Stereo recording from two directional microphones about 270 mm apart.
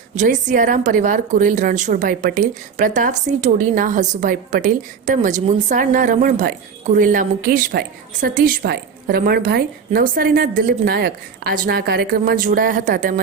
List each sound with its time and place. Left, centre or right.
0.1 s a woman's voice: right